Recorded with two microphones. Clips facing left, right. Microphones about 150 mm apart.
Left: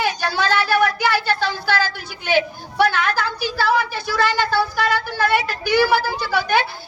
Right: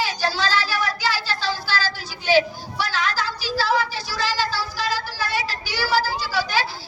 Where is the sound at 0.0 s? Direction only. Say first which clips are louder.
Left 2 dB; 60° left (ahead or behind).